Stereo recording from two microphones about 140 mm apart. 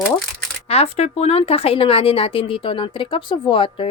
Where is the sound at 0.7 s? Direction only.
50° left (ahead or behind).